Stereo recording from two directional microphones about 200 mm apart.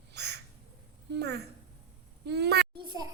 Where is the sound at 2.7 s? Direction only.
20° right (ahead or behind).